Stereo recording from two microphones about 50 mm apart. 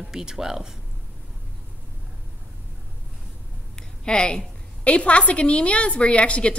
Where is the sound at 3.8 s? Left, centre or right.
Centre.